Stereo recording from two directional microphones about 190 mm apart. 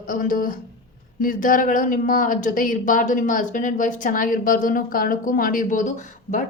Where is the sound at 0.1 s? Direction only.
45° left (ahead or behind).